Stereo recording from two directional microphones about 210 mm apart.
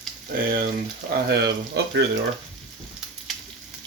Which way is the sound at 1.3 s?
55° right (ahead or behind).